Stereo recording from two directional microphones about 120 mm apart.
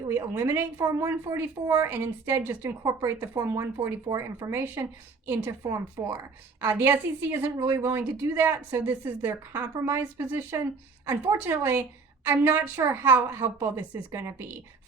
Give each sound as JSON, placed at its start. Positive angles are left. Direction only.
{"t": 0.1, "sound": "a woman's voice", "side_deg": -25}